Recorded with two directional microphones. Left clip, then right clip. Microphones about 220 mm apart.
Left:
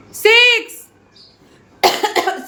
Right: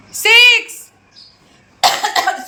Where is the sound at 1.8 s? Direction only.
20° left (ahead or behind).